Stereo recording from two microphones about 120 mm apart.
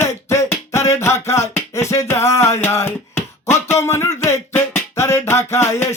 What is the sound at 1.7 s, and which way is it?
Music, 25° left (ahead or behind).